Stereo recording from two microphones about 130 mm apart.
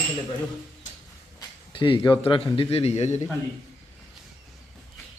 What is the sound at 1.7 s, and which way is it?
A man's voice, 40° left (ahead or behind).